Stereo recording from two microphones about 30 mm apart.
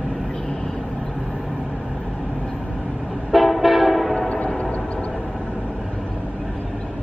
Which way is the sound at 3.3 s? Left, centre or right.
Centre.